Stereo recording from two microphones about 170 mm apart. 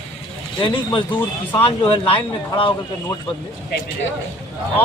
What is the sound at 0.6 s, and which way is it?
Speech, 30° left (ahead or behind).